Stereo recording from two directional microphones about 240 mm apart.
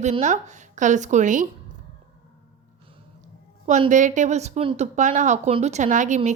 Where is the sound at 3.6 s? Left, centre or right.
Right.